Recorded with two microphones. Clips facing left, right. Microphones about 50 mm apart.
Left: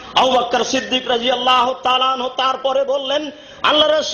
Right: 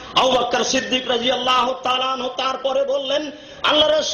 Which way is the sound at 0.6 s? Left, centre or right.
Centre.